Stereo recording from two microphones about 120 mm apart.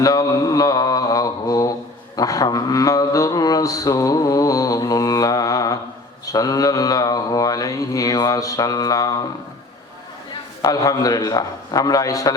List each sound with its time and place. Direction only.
0.0 s mantra: 30° left (ahead or behind)
10.6 s mantra: 30° left (ahead or behind)